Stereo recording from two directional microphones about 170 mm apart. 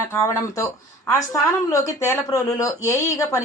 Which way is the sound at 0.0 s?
15° left (ahead or behind).